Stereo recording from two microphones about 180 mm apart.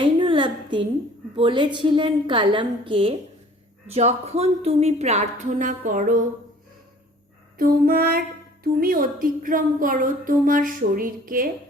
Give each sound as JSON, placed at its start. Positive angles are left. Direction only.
{"t": 0.0, "sound": "a sound", "side_deg": -25}
{"t": 1.4, "sound": "a woman's voice", "side_deg": -25}
{"t": 7.6, "sound": "female singing", "side_deg": -55}
{"t": 8.6, "sound": "a woman's voice", "side_deg": -55}